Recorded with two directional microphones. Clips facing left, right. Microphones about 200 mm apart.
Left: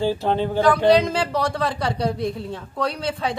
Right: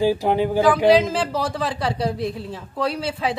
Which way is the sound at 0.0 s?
15° right (ahead or behind).